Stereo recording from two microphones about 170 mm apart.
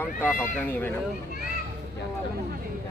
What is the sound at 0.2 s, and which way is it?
Speech, 10° left (ahead or behind).